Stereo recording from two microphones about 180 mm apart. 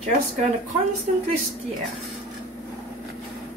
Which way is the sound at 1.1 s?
45° right (ahead or behind).